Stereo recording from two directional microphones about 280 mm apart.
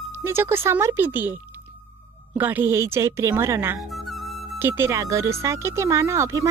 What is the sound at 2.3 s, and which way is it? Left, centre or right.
Speech, centre.